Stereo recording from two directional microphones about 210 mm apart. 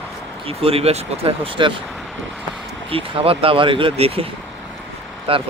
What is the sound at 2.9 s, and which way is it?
Speech, 25° right (ahead or behind).